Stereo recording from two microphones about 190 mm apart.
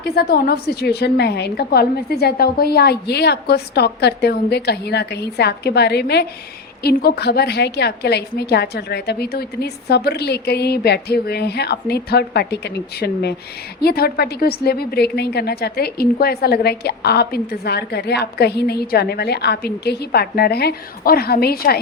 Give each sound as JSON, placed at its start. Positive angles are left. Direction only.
{"t": 0.0, "sound": "a woman's voice", "side_deg": 55}